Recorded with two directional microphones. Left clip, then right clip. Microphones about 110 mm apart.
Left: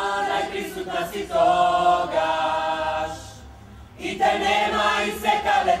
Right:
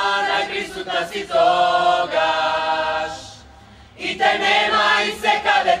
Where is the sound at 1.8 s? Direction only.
40° right (ahead or behind).